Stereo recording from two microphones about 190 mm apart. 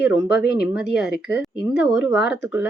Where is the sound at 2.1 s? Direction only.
65° left (ahead or behind).